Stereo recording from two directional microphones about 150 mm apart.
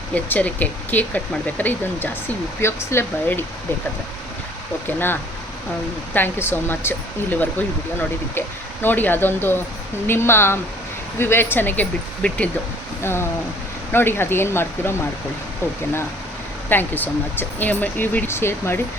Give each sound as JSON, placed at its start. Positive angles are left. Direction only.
{"t": 0.1, "sound": "speech", "side_deg": 10}
{"t": 6.1, "sound": "speech", "side_deg": 15}
{"t": 16.6, "sound": "speech", "side_deg": 15}